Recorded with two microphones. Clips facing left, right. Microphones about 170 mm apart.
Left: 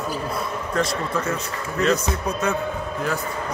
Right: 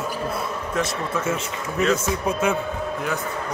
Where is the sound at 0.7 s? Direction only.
5° right (ahead or behind).